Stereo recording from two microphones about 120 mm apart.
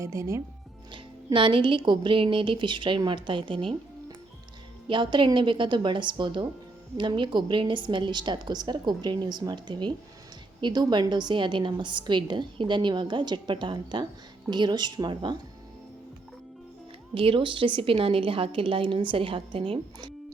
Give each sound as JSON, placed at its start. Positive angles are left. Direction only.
{"t": 0.0, "sound": "speech", "side_deg": -25}
{"t": 0.9, "sound": "speech", "side_deg": -45}
{"t": 4.9, "sound": "a woman's voice", "side_deg": -45}
{"t": 17.2, "sound": "speech", "side_deg": -45}